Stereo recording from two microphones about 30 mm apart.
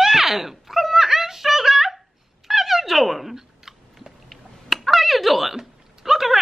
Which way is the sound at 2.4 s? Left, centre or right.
Centre.